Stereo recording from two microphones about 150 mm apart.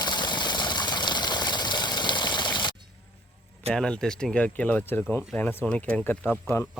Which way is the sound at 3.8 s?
5° left (ahead or behind).